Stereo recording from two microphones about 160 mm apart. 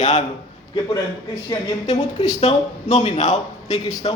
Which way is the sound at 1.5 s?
40° left (ahead or behind).